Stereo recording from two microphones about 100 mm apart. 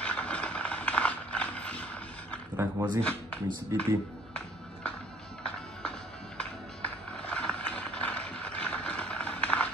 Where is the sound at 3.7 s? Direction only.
30° right (ahead or behind).